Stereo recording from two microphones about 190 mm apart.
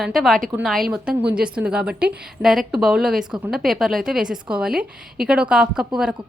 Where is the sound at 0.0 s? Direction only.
Centre (ahead or behind).